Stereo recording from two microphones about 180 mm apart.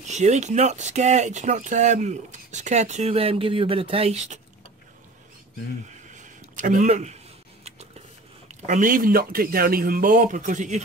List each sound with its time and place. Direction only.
0.1 s speech: 40° right (ahead or behind)
6.1 s a sound: 45° right (ahead or behind)
8.5 s speech: 45° right (ahead or behind)